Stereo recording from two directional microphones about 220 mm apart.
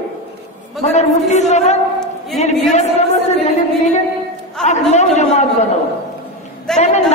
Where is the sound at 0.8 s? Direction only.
30° left (ahead or behind).